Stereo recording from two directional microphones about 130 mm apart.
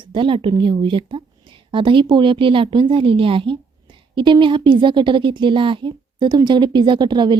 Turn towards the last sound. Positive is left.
turn(degrees=-35)  # may be behind; listen again after turning